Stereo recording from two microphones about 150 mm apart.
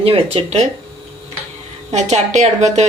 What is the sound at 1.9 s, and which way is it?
Speech, 50° right (ahead or behind).